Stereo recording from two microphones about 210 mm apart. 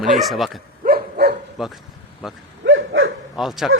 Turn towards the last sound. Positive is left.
turn(degrees=0)  # may be behind; listen again after turning